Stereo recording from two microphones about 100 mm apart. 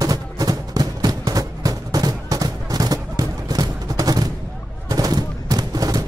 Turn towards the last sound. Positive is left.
turn(degrees=-40)  # may be behind; listen again after turning